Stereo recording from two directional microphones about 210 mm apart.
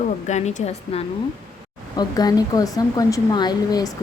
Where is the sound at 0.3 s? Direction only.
35° left (ahead or behind).